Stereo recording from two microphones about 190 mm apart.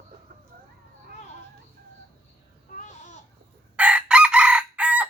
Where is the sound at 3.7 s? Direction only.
5° right (ahead or behind).